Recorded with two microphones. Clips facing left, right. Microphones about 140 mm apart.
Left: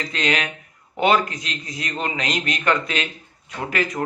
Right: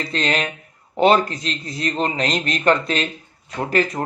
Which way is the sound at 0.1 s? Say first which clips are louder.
Right 1 dB; 35° right (ahead or behind).